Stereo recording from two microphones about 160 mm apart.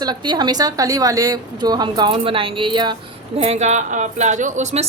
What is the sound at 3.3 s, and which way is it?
A woman's voice, 40° right (ahead or behind).